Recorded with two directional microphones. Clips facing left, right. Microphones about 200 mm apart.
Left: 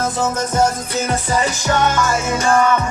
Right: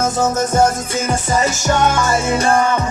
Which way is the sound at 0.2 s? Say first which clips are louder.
Right 3 dB; 45° right (ahead or behind).